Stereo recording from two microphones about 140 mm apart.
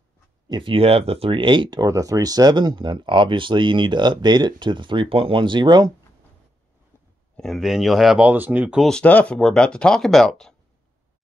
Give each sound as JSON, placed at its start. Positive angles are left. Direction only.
{"t": 0.5, "sound": "speech", "side_deg": -35}
{"t": 7.3, "sound": "speech", "side_deg": 0}
{"t": 8.8, "sound": "speech", "side_deg": 5}